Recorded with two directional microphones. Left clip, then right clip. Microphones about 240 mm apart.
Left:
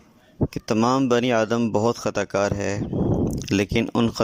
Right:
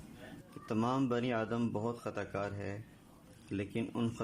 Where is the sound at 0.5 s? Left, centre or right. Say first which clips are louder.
Left 14 dB; left.